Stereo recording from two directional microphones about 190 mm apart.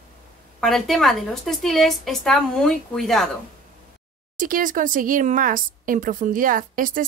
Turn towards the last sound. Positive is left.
turn(degrees=-45)  # may be behind; listen again after turning